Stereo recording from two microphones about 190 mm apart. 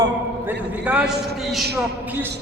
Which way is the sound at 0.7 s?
5° right (ahead or behind).